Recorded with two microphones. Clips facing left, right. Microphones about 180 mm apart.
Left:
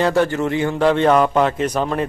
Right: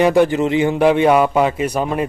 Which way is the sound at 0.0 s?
15° right (ahead or behind).